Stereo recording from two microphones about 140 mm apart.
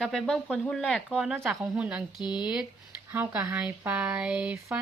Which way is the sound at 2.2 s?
30° left (ahead or behind).